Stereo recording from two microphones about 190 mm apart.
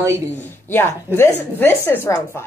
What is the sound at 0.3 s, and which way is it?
A woman's voice, 10° left (ahead or behind).